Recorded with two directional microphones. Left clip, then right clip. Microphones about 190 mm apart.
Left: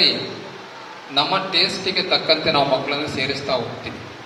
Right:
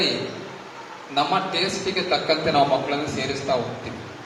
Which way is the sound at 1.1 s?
30° left (ahead or behind).